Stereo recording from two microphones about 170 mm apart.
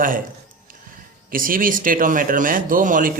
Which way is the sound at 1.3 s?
55° right (ahead or behind).